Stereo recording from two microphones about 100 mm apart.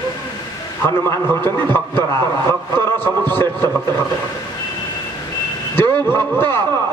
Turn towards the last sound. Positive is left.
turn(degrees=20)  # may be behind; listen again after turning